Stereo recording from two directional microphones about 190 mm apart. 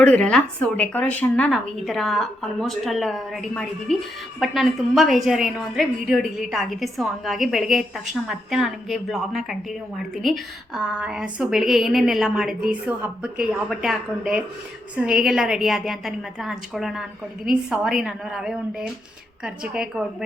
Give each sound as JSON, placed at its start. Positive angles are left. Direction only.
{"t": 0.0, "sound": "a woman's voice", "side_deg": 5}